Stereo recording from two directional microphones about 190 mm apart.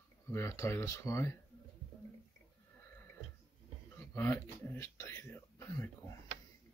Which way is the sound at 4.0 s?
15° left (ahead or behind).